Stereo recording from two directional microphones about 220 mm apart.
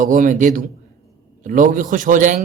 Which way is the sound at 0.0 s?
35° right (ahead or behind).